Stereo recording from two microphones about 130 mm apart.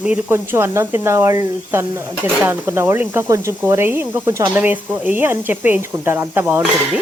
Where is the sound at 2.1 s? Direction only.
25° right (ahead or behind).